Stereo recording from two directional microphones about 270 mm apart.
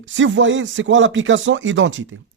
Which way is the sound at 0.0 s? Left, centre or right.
Right.